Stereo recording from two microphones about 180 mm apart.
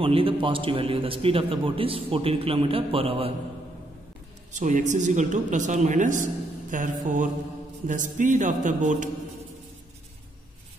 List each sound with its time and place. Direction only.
0.0 s a man's voice: 30° right (ahead or behind)
4.5 s a woman's voice: 40° right (ahead or behind)